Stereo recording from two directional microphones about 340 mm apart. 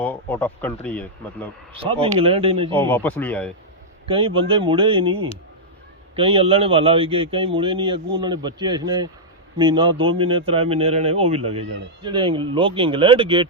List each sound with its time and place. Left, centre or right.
0.0 s speech: centre
1.7 s a man's voice: centre
2.7 s speech: centre
4.0 s a man's voice: centre